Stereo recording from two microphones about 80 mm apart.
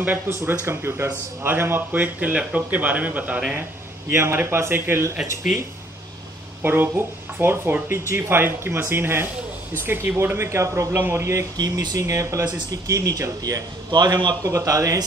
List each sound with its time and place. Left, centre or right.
0.0 s speech: right
4.1 s speech: right
6.6 s speech: right
10.9 s speech: right
11.5 s speech: right
12.0 s speech: right
13.8 s a man's voice: right
14.4 s speech: right